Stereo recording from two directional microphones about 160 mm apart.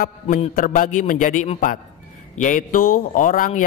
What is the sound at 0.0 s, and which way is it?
A man's voice, 60° left (ahead or behind).